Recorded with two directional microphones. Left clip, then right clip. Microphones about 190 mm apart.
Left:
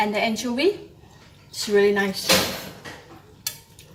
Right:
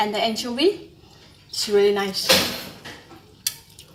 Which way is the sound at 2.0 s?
Centre (ahead or behind).